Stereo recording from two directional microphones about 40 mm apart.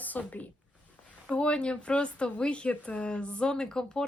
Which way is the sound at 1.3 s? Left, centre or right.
Left.